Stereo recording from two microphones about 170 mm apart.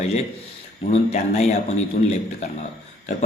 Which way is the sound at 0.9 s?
40° left (ahead or behind).